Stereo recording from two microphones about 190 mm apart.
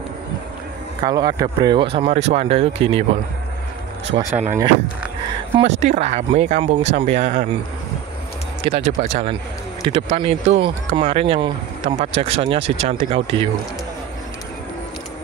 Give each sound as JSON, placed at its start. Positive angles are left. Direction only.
{"t": 1.0, "sound": "speech", "side_deg": -20}
{"t": 4.1, "sound": "speech", "side_deg": -35}
{"t": 5.6, "sound": "speech", "side_deg": -35}
{"t": 8.6, "sound": "speech", "side_deg": -35}